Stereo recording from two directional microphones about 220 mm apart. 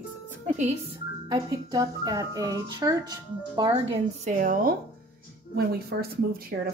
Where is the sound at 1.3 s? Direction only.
15° right (ahead or behind).